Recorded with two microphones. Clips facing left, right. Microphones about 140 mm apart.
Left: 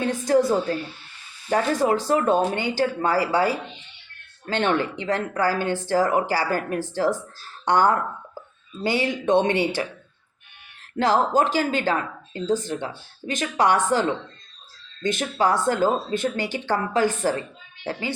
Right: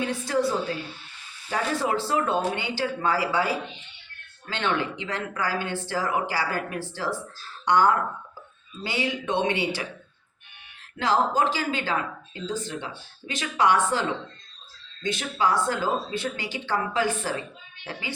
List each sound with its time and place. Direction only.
0.0 s speech: 45° left (ahead or behind)
10.9 s speech: 45° left (ahead or behind)
15.0 s speech: 45° left (ahead or behind)